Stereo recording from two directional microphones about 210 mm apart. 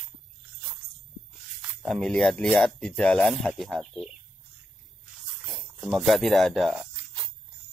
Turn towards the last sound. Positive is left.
turn(degrees=0)  # may be behind; listen again after turning